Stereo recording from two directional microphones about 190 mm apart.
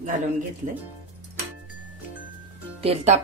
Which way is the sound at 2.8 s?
35° right (ahead or behind).